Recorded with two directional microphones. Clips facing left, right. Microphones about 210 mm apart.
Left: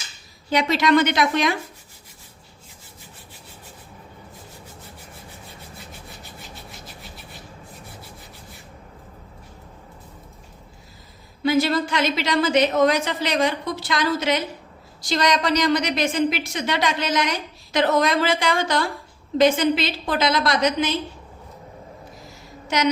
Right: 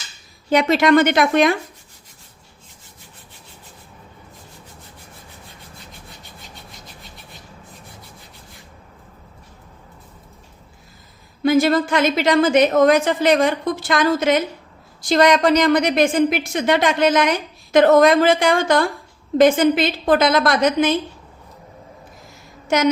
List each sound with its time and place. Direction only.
0.5 s a woman's voice: 50° right (ahead or behind)
6.5 s rub: 5° left (ahead or behind)
11.4 s a woman's voice: 50° right (ahead or behind)